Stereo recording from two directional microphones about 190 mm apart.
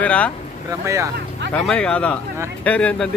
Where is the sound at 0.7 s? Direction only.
15° right (ahead or behind).